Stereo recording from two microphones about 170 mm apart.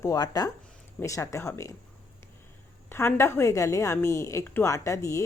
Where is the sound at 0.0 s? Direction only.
20° left (ahead or behind).